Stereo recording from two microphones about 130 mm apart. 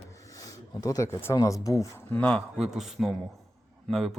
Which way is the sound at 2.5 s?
5° right (ahead or behind).